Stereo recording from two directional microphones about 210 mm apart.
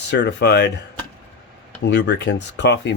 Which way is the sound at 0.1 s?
55° left (ahead or behind).